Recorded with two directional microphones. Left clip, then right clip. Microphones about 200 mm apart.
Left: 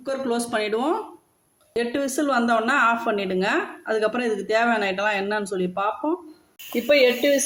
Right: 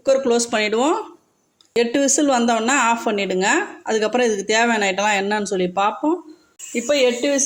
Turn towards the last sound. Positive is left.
turn(degrees=0)  # may be behind; listen again after turning